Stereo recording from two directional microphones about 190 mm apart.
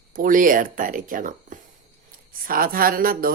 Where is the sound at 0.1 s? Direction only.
45° right (ahead or behind).